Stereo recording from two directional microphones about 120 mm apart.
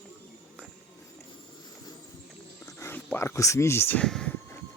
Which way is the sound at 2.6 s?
20° left (ahead or behind).